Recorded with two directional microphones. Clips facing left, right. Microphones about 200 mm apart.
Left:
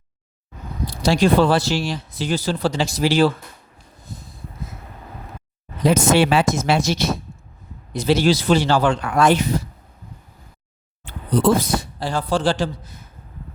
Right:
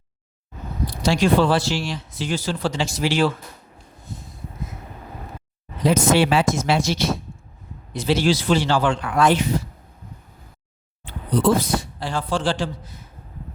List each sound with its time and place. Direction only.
1.0 s speech: 35° left (ahead or behind)
4.1 s snort: 35° left (ahead or behind)
5.8 s speech: 55° left (ahead or behind)
11.0 s a man's voice: 45° left (ahead or behind)